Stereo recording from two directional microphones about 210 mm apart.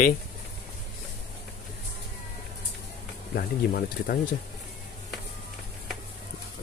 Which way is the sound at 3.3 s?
45° left (ahead or behind).